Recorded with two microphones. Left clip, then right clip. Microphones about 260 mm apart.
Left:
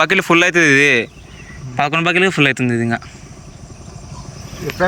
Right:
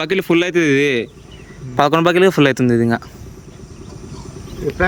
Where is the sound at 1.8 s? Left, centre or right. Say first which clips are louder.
Right 2 dB; right.